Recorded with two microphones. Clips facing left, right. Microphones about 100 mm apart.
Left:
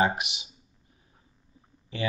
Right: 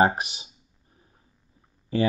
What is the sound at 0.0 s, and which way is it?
Speech, 40° right (ahead or behind).